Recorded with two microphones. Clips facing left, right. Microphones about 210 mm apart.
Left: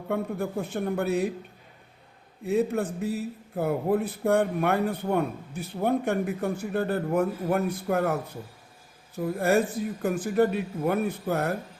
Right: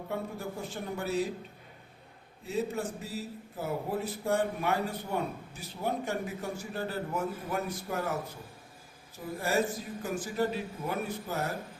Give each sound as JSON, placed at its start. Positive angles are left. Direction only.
{"t": 0.1, "sound": "a man's voice", "side_deg": 60}
{"t": 2.4, "sound": "a man's voice", "side_deg": 60}
{"t": 9.1, "sound": "a man's voice", "side_deg": 60}